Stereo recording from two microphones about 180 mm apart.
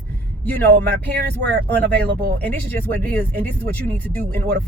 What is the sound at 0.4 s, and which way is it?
Speech, 10° left (ahead or behind).